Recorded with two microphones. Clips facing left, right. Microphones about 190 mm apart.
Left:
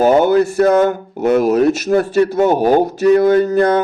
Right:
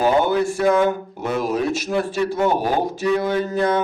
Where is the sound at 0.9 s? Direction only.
70° left (ahead or behind).